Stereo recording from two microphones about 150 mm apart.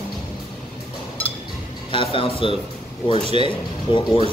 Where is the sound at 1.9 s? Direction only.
35° left (ahead or behind).